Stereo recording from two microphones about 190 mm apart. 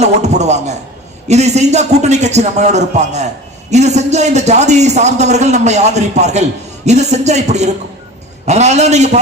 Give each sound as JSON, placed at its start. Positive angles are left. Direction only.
{"t": 0.0, "sound": "a man's voice", "side_deg": -35}